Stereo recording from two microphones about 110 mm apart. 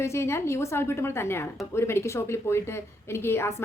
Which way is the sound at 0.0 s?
25° left (ahead or behind).